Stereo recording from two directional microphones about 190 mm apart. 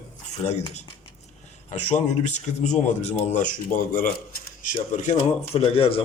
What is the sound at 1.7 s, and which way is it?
Speech, 35° left (ahead or behind).